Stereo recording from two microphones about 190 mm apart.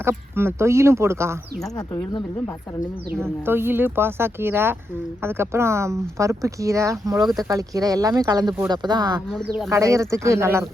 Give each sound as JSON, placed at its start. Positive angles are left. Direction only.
{"t": 0.0, "sound": "speech", "side_deg": -10}
{"t": 3.4, "sound": "speech", "side_deg": -10}